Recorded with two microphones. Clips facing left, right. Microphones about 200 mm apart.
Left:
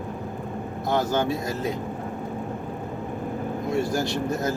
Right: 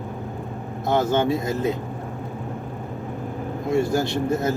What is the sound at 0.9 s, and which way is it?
Speech, 25° right (ahead or behind).